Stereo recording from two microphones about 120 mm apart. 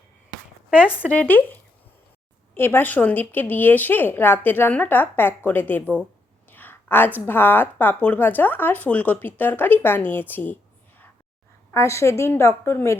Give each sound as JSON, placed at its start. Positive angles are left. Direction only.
{"t": 0.9, "sound": "speech", "side_deg": 15}
{"t": 2.6, "sound": "a woman's voice", "side_deg": 15}